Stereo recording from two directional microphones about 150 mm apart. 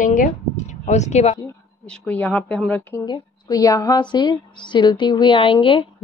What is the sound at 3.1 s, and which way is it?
A woman's voice, 25° left (ahead or behind).